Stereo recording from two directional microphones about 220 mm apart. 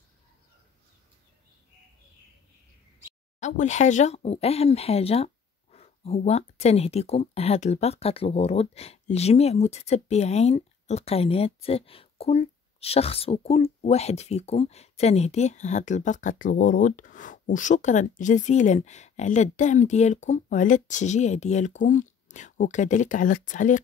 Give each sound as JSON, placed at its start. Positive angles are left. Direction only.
{"t": 3.3, "sound": "speech", "side_deg": 30}